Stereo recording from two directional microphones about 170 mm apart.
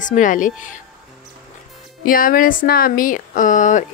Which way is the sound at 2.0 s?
55° left (ahead or behind).